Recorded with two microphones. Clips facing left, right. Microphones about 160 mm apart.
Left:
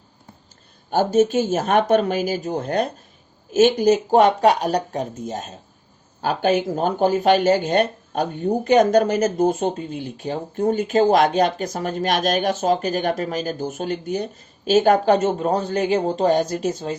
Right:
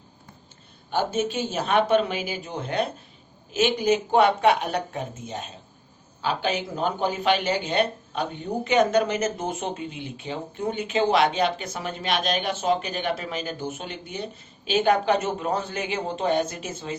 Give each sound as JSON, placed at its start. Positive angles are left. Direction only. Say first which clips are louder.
{"t": 0.9, "sound": "speech", "louder": "left 8 dB", "side_deg": 40}